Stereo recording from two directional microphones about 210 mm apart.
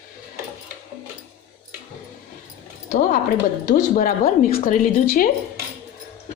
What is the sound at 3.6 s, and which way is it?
A woman's voice, 40° left (ahead or behind).